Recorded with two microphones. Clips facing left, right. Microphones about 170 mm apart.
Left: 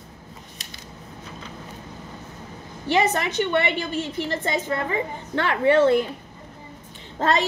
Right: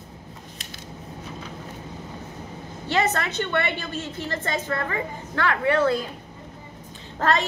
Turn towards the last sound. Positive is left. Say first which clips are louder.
# left 1 dB
turn(degrees=20)  # may be behind; listen again after turning